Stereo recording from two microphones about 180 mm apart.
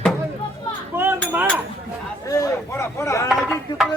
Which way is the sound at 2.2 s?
20° left (ahead or behind).